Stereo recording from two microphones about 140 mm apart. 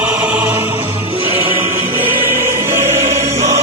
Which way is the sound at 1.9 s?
15° right (ahead or behind).